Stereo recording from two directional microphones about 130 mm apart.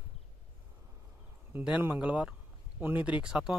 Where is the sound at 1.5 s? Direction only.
15° right (ahead or behind).